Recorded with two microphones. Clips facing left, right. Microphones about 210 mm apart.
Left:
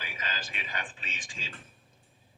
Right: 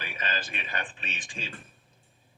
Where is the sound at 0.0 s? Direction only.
60° right (ahead or behind).